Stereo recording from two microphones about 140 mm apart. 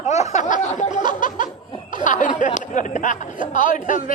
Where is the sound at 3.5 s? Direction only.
70° left (ahead or behind).